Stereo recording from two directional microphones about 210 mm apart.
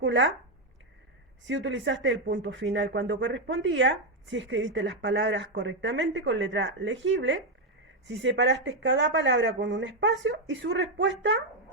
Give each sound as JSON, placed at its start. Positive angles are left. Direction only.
{"t": 0.0, "sound": "speech", "side_deg": -60}
{"t": 1.5, "sound": "speech", "side_deg": -60}